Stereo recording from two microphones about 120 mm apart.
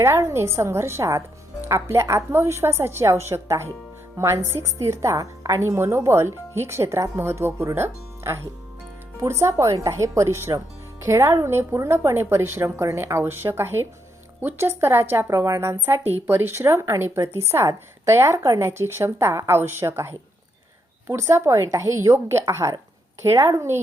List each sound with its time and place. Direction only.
0.0 s a woman's voice: 20° right (ahead or behind)